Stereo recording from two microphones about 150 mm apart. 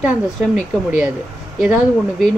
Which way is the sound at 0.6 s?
5° right (ahead or behind).